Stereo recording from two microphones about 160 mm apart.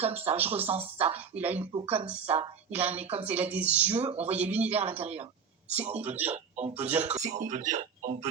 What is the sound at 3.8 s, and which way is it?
Speech, 40° right (ahead or behind).